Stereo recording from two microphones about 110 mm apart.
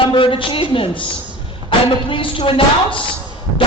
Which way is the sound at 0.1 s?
50° left (ahead or behind).